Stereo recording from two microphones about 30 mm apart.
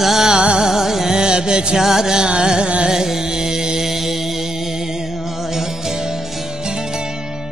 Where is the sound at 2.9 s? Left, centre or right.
Centre.